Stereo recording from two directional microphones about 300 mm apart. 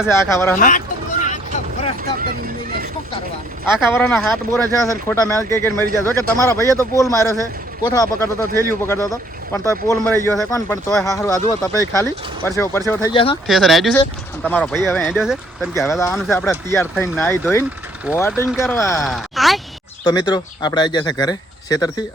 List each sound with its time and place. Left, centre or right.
0.1 s speech: centre
0.5 s speech: left
1.2 s vehicle: left
3.7 s speech: centre
13.5 s speech: centre
20.1 s speech: centre